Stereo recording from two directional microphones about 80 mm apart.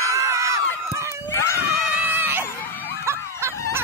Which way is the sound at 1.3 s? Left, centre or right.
Left.